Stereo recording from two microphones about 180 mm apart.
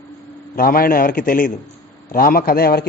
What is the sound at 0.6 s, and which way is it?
A man's voice, 55° left (ahead or behind).